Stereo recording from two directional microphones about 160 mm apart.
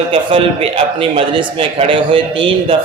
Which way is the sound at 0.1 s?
35° right (ahead or behind).